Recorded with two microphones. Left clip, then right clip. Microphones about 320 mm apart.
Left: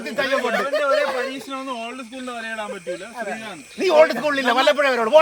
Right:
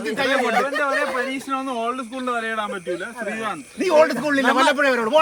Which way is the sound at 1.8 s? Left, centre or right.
Right.